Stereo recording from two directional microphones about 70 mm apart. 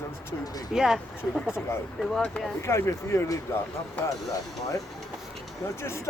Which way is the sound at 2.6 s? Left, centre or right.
Left.